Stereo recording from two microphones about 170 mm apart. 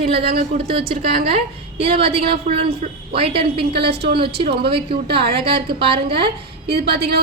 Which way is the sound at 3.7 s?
75° right (ahead or behind).